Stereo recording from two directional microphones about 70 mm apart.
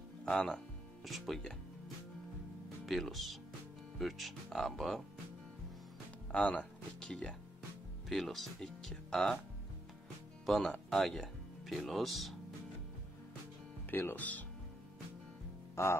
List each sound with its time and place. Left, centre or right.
0.2 s speech: centre
2.9 s speech: centre
6.3 s speech: centre
10.4 s speech: centre
13.8 s speech: left
15.7 s speech: left